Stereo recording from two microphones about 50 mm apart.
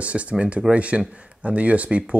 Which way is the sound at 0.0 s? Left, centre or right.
Right.